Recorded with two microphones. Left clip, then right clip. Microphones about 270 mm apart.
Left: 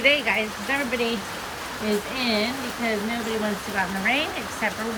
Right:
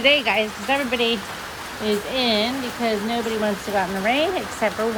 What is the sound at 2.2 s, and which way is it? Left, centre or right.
Speech, centre.